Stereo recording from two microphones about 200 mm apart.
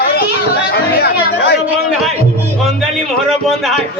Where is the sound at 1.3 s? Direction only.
55° left (ahead or behind).